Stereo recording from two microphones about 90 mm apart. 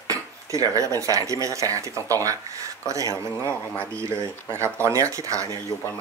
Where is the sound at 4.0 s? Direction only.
30° right (ahead or behind).